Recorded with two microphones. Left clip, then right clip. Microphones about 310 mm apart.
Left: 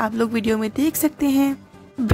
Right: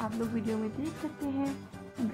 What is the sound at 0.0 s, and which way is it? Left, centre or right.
Speech, left.